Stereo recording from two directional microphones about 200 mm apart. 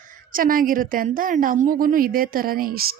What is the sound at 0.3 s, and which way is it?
A woman's voice, 45° right (ahead or behind).